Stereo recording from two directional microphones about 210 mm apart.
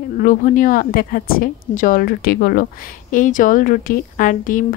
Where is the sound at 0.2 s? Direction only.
40° left (ahead or behind).